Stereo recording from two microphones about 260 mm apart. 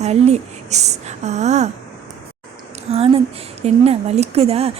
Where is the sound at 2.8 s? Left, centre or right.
Right.